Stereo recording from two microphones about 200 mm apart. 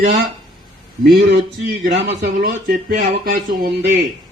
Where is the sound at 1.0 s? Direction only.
50° right (ahead or behind).